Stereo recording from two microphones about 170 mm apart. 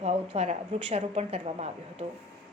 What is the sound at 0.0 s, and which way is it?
A woman's voice, 35° right (ahead or behind).